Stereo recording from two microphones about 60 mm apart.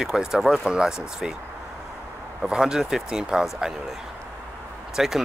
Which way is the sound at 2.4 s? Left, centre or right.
Centre.